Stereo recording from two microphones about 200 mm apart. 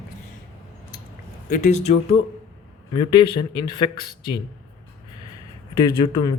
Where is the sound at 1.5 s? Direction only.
35° left (ahead or behind).